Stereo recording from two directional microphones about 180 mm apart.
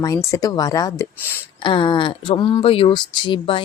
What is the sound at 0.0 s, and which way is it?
Speech, 15° left (ahead or behind).